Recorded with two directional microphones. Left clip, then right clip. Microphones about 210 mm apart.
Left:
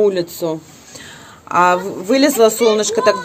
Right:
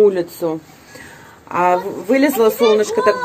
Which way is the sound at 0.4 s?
10° left (ahead or behind).